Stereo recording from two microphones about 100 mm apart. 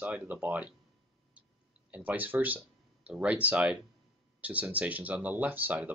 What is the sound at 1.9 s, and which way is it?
Speech, 15° right (ahead or behind).